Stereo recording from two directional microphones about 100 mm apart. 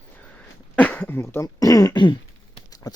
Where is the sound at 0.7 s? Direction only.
15° left (ahead or behind).